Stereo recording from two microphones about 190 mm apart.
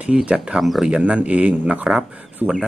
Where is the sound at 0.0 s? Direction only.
5° right (ahead or behind).